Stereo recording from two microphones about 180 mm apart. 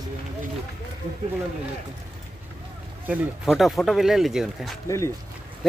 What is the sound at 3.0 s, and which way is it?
Speech, 10° right (ahead or behind).